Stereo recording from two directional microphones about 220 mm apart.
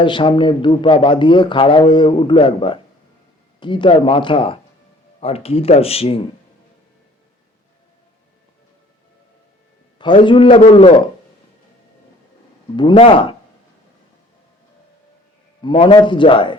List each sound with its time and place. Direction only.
0.0 s speech: 20° left (ahead or behind)
10.0 s speech: 20° left (ahead or behind)
12.7 s speech: 20° left (ahead or behind)
15.6 s speech: 20° left (ahead or behind)